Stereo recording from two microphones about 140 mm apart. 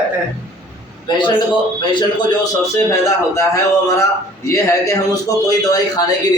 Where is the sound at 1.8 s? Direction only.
30° left (ahead or behind).